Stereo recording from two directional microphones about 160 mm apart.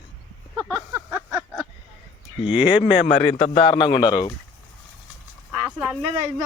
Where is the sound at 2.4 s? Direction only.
30° left (ahead or behind).